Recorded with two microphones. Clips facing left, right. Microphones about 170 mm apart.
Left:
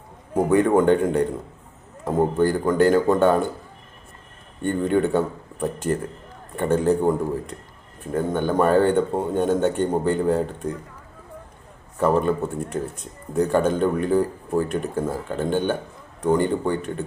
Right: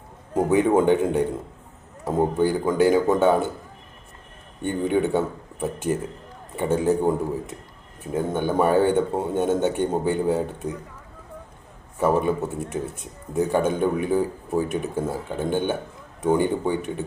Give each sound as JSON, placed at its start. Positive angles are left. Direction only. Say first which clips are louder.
{"t": 0.4, "sound": "speech", "louder": "left 1 dB", "side_deg": -5}
{"t": 4.6, "sound": "speech", "louder": "left 2 dB", "side_deg": -10}
{"t": 11.9, "sound": "speech", "louder": "left 1 dB", "side_deg": -10}